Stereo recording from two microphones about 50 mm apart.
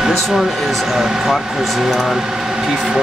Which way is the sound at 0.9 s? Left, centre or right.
Centre.